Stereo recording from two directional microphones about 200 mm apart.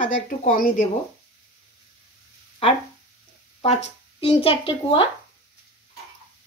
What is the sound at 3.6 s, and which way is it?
Speech, 30° left (ahead or behind).